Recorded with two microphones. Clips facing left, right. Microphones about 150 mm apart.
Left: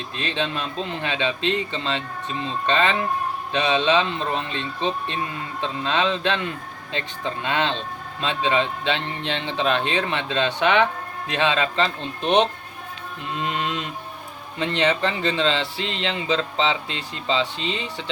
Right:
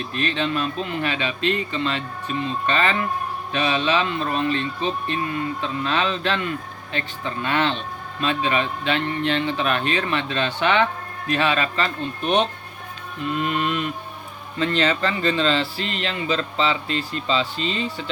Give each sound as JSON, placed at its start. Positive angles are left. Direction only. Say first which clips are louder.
{"t": 0.1, "sound": "speech", "louder": "right 2 dB", "side_deg": 20}